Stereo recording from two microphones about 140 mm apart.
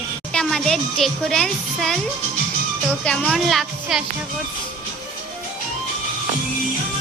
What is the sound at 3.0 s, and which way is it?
Speech, 5° left (ahead or behind).